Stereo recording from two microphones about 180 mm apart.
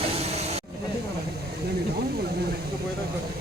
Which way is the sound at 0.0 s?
35° right (ahead or behind).